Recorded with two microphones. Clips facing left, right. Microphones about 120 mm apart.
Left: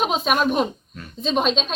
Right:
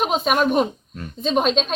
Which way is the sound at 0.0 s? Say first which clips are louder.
Right 1 dB; 5° right (ahead or behind).